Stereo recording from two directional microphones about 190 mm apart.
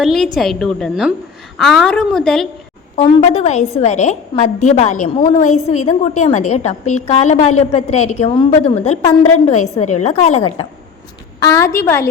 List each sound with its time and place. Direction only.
0.0 s a woman's voice: centre (ahead or behind)
2.9 s a woman's voice: 35° left (ahead or behind)
11.3 s a woman's voice: 15° left (ahead or behind)